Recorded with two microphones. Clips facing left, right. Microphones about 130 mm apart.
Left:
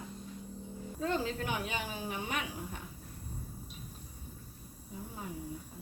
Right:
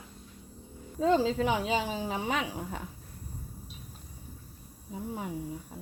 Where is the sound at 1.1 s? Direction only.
90° right.